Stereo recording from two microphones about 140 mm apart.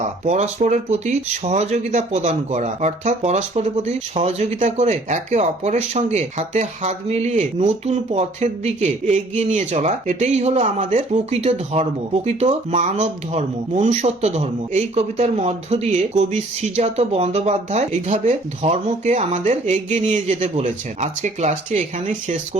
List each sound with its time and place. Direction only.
0.0 s speech: 55° right (ahead or behind)